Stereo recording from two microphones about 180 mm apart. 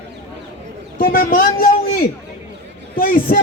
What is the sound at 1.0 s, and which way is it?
A man's voice, 55° left (ahead or behind).